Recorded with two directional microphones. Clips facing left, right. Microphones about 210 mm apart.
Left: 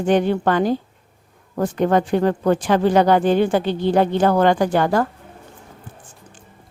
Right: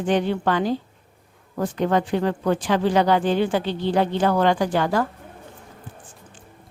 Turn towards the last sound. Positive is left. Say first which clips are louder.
# left 4 dB
turn(degrees=50)  # may be behind; listen again after turning